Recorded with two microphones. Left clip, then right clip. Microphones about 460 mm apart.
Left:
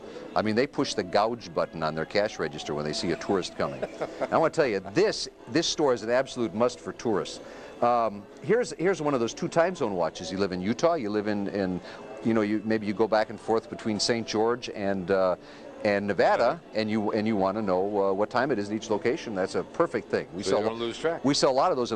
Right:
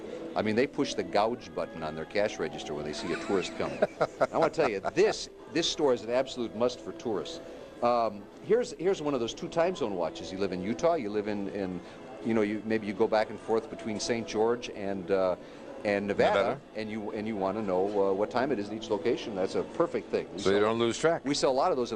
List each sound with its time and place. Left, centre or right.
0.3 s speech: left
3.8 s speech: right
4.3 s speech: left
20.6 s speech: right
21.2 s speech: left